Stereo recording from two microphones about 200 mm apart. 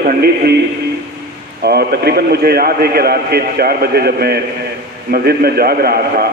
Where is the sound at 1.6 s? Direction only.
55° right (ahead or behind).